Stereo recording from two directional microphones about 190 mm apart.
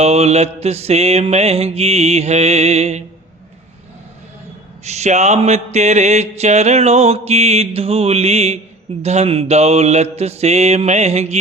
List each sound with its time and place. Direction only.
0.0 s mantra: 35° right (ahead or behind)
4.8 s mantra: 35° right (ahead or behind)